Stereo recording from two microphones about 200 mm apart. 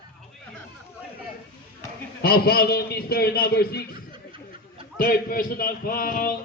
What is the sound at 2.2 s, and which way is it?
A man's voice, 50° left (ahead or behind).